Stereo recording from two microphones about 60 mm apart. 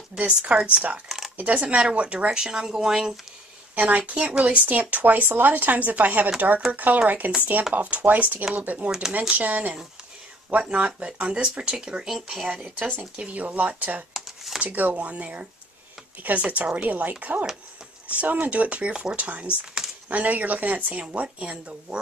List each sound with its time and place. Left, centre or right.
0.2 s speech: centre
1.0 s a sound: centre
1.4 s speech: right
3.7 s speech: right; by 12.4 s centre
12.6 s speech: right
14.1 s a sound: centre
14.6 s speech: right